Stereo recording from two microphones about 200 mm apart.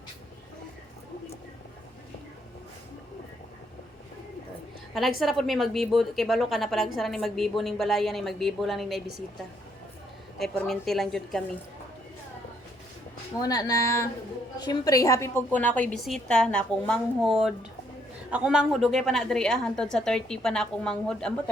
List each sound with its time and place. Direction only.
4.9 s a woman's voice: centre (ahead or behind)
10.3 s a woman's voice: centre (ahead or behind)
13.4 s a woman's voice: 20° left (ahead or behind)